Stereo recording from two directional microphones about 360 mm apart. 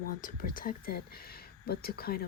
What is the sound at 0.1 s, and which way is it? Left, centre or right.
Speech, left.